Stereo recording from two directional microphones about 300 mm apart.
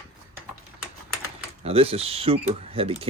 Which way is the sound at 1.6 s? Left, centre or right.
Centre.